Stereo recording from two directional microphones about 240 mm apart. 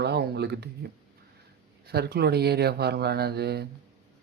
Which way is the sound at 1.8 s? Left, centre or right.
Right.